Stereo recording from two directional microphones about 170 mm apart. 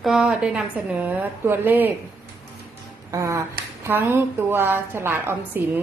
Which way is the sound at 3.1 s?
20° right (ahead or behind).